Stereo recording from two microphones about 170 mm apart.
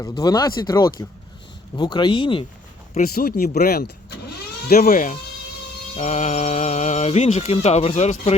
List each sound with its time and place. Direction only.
0.0 s speech: 25° left (ahead or behind)
3.0 s speech: 60° left (ahead or behind)
4.7 s speech: 50° left (ahead or behind)